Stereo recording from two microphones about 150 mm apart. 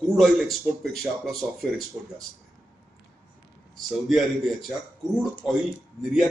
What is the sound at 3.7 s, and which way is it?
Speech, centre (ahead or behind).